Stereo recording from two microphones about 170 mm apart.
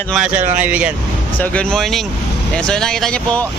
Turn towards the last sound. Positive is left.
turn(degrees=5)  # may be behind; listen again after turning